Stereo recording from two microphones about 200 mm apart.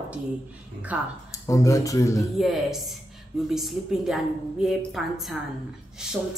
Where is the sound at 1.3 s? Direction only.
15° left (ahead or behind).